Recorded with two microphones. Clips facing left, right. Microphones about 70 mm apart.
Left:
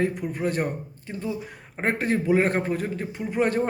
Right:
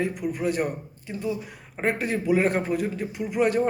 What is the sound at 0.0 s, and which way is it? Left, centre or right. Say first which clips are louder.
A man's voice: left 1 dB; left.